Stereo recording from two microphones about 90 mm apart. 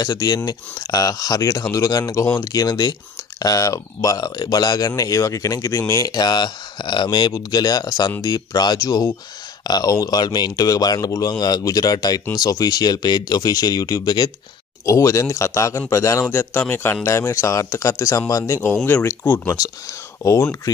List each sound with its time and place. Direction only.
0.0 s speech: 50° left (ahead or behind)
14.9 s speech: 35° left (ahead or behind)
20.2 s speech: 35° left (ahead or behind)